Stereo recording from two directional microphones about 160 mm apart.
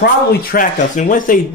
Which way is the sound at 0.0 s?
70° left (ahead or behind).